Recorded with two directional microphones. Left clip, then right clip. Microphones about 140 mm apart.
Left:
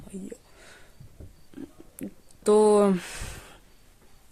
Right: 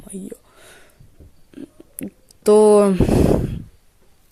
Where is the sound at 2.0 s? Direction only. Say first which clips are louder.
Right 8 dB; 45° right (ahead or behind).